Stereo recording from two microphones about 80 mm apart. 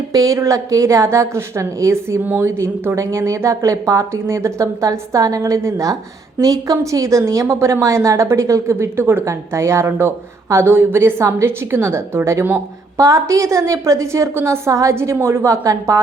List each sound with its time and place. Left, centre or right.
0.1 s a woman's voice: right
2.2 s speech: right
2.6 s a woman's voice: right
8.7 s a woman's voice: right
15.6 s a woman's voice: right